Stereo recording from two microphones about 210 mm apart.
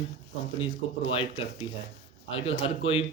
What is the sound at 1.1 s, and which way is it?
Speech, 25° left (ahead or behind).